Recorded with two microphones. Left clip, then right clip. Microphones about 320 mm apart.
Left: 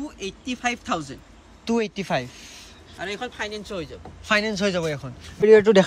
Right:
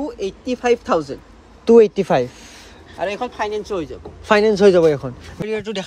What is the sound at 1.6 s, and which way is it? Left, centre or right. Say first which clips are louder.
Speech: right 14 dB; centre.